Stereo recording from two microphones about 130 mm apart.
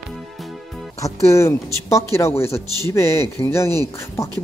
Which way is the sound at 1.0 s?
20° left (ahead or behind).